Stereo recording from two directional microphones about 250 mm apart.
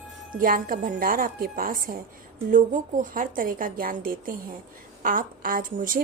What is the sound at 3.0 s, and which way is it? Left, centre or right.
A woman's voice, right.